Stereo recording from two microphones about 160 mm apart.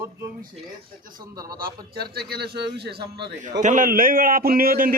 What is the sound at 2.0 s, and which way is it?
Speech, 85° right.